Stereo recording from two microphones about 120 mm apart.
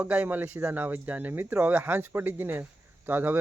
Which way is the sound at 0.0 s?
10° right (ahead or behind).